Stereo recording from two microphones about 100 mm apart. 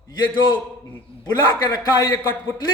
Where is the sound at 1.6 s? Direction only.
45° left (ahead or behind).